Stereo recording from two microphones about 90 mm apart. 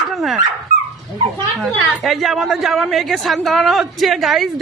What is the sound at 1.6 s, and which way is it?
Speech, centre (ahead or behind).